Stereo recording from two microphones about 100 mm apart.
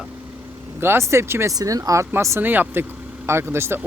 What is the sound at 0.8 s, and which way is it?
Speech, 25° right (ahead or behind).